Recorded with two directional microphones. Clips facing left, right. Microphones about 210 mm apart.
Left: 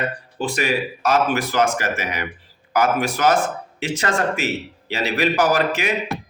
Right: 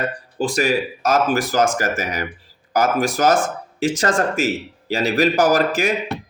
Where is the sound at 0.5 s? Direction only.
45° right (ahead or behind).